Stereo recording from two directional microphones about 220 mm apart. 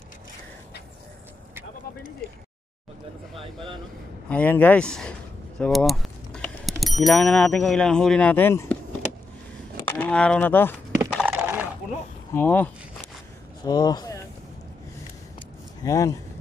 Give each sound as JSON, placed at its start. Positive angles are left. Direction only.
{"t": 3.3, "sound": "speech", "side_deg": -25}
{"t": 4.3, "sound": "speech", "side_deg": 5}
{"t": 9.8, "sound": "speech", "side_deg": 10}
{"t": 11.1, "sound": "a sound", "side_deg": -10}
{"t": 12.4, "sound": "speech", "side_deg": 10}
{"t": 13.7, "sound": "speech", "side_deg": 20}
{"t": 15.8, "sound": "speech", "side_deg": 15}